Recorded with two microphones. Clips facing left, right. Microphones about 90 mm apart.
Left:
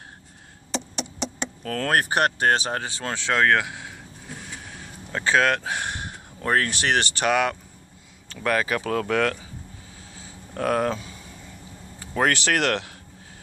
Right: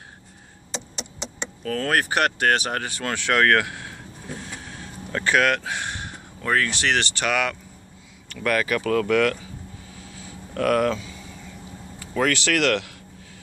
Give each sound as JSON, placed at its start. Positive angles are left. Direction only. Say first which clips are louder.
{"t": 1.6, "sound": "speech", "louder": "even", "side_deg": 45}
{"t": 5.1, "sound": "speech", "louder": "even", "side_deg": 20}
{"t": 10.5, "sound": "speech", "louder": "right 3 dB", "side_deg": 25}
{"t": 11.9, "sound": "speech", "louder": "even", "side_deg": 35}